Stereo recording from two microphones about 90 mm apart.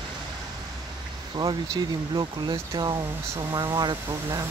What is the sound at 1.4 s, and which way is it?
Speech, 45° right (ahead or behind).